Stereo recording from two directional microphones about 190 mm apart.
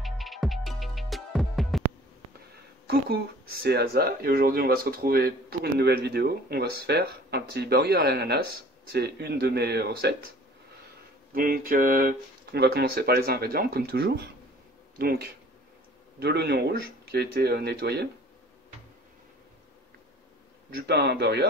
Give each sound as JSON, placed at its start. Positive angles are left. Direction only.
{"t": 0.0, "sound": "music", "side_deg": 0}
{"t": 3.6, "sound": "speech", "side_deg": -55}
{"t": 11.3, "sound": "speech", "side_deg": -45}
{"t": 20.7, "sound": "speech", "side_deg": -60}